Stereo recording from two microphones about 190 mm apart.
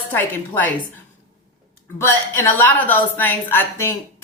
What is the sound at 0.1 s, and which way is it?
Speech, 10° left (ahead or behind).